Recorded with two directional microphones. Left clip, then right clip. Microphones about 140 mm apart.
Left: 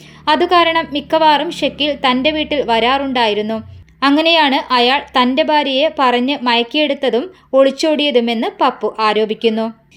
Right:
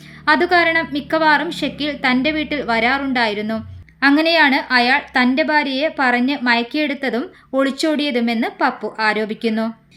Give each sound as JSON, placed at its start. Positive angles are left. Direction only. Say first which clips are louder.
{"t": 0.3, "sound": "a woman's voice", "louder": "left 2 dB", "side_deg": 15}